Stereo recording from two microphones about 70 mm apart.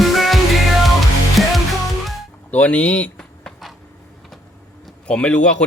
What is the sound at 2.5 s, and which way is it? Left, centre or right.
Speech, left.